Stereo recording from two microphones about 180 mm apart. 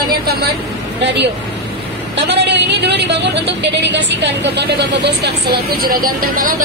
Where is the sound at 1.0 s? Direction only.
75° right (ahead or behind).